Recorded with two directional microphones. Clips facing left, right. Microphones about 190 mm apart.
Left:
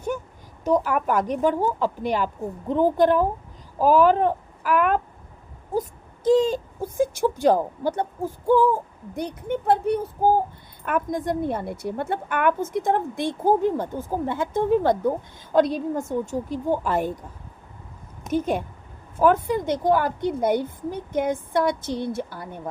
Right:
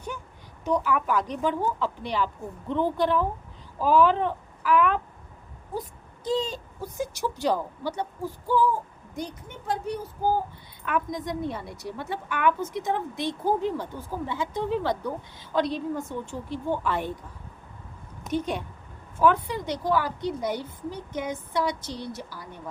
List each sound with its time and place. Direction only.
0.6 s speech: 40° left (ahead or behind)
6.2 s speech: 50° left (ahead or behind)
18.3 s speech: 45° left (ahead or behind)